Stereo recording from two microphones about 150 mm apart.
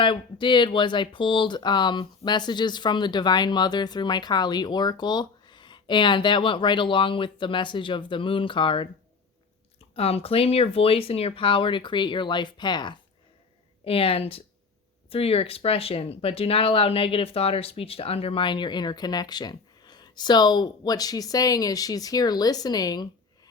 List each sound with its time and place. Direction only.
0.0 s speech: 35° left (ahead or behind)
9.9 s speech: 40° left (ahead or behind)